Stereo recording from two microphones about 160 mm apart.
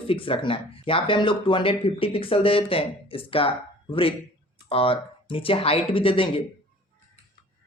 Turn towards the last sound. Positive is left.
turn(degrees=35)  # may be behind; listen again after turning